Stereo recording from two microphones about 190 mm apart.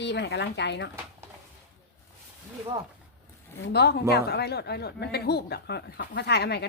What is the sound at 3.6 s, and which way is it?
A woman's voice, 60° left (ahead or behind).